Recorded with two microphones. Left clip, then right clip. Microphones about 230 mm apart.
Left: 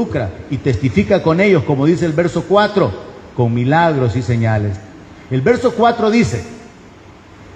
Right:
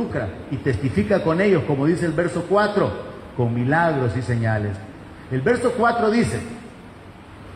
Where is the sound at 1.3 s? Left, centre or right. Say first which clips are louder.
Left 6 dB; left.